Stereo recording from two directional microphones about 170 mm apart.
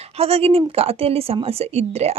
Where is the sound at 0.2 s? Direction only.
35° right (ahead or behind).